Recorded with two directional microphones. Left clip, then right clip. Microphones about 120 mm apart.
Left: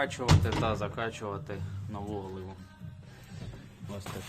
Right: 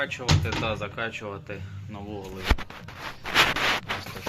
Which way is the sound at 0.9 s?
Centre (ahead or behind).